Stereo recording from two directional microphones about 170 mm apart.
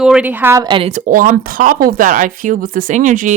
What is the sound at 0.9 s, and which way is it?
Speech, 50° right (ahead or behind).